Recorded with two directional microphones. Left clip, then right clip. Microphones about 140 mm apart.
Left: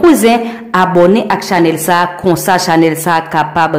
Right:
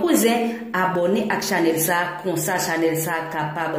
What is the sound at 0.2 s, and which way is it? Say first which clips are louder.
A woman's voice: left 9 dB; 25° left (ahead or behind).